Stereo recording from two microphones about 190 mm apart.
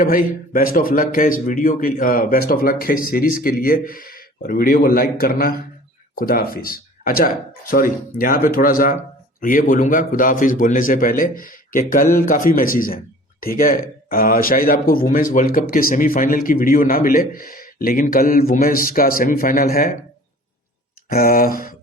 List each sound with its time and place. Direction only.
0.0 s a man's voice: 45° left (ahead or behind)
21.1 s speech: 50° left (ahead or behind)